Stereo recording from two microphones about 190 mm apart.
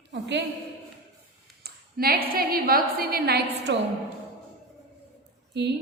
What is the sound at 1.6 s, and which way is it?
A woman's voice, 50° right (ahead or behind).